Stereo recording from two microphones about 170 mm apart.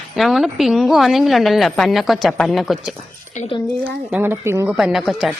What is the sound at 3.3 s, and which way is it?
Speech, 35° left (ahead or behind).